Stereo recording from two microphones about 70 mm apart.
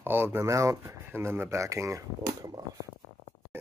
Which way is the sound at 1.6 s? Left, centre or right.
Right.